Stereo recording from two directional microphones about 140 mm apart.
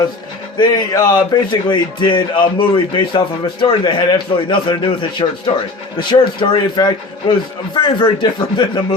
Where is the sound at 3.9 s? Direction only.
35° left (ahead or behind).